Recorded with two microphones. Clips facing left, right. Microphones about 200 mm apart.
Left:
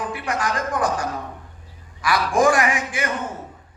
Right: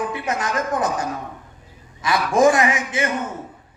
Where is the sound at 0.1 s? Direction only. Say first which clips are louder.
Right 1 dB; 25° right (ahead or behind).